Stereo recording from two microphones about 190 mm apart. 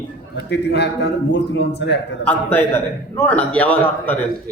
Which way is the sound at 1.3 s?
65° left (ahead or behind).